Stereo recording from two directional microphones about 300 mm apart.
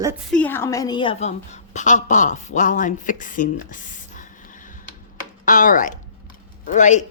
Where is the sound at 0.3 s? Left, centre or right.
Centre.